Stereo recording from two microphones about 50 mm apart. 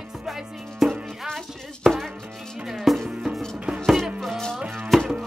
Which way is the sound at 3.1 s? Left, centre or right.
Centre.